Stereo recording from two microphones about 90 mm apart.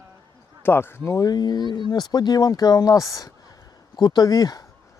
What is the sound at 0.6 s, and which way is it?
Speech, 25° left (ahead or behind).